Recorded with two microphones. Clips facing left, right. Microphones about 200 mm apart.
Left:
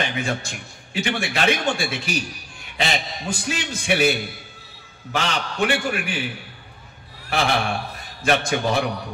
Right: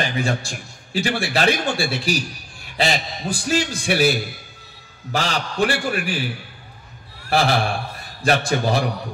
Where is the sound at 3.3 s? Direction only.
35° right (ahead or behind).